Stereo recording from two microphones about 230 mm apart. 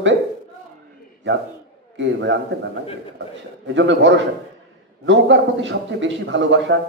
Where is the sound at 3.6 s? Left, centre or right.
Right.